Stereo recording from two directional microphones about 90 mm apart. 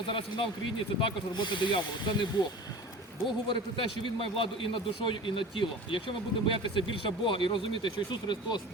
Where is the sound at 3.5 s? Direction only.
70° left (ahead or behind).